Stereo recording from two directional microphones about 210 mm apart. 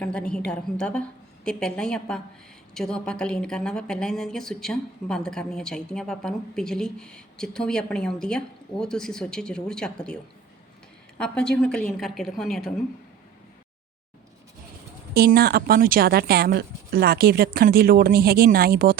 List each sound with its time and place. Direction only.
0.0 s speech: 5° left (ahead or behind)
11.2 s speech: 5° left (ahead or behind)
15.1 s speech: 45° right (ahead or behind)